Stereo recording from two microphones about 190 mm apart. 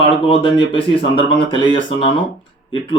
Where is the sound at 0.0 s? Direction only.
30° left (ahead or behind).